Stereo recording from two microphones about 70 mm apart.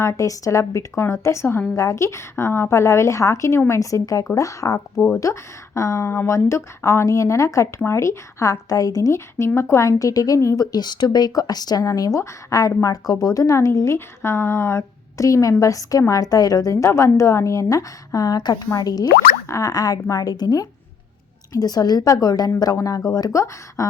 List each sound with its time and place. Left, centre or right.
0.0 s a woman's voice: left
9.6 s speech: left
10.7 s a woman's voice: left
19.5 s a woman's voice: left
23.3 s speech: left